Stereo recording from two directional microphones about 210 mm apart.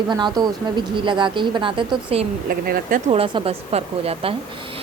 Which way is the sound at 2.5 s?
45° right (ahead or behind).